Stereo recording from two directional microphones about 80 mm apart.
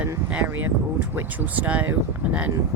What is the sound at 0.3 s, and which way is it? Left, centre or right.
Speech, right.